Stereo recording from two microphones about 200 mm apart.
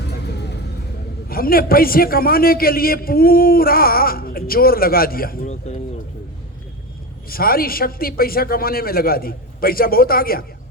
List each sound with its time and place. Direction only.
0.3 s vehicle: 55° left (ahead or behind)
1.3 s a man's voice: 45° left (ahead or behind)
7.3 s a man's voice: 45° left (ahead or behind)